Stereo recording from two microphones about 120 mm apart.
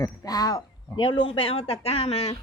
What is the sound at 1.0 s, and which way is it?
Speech, 45° left (ahead or behind).